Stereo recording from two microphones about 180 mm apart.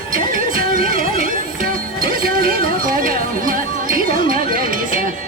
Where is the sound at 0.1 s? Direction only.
50° right (ahead or behind).